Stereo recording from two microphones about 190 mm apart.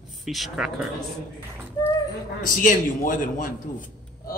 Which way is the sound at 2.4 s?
45° left (ahead or behind).